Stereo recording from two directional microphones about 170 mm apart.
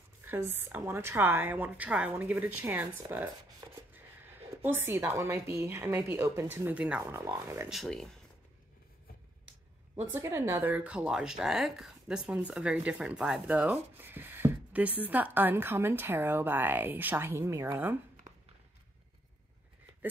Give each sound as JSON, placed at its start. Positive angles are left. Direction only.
{"t": 0.2, "sound": "speech", "side_deg": -10}
{"t": 4.6, "sound": "speech", "side_deg": -10}
{"t": 7.7, "sound": "speech", "side_deg": 0}
{"t": 10.1, "sound": "speech", "side_deg": -15}